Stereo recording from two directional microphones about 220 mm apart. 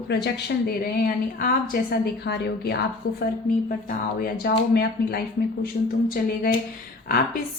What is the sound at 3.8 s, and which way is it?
A woman's voice, 45° left (ahead or behind).